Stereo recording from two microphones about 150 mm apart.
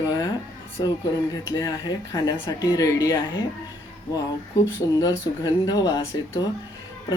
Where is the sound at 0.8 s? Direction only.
30° left (ahead or behind).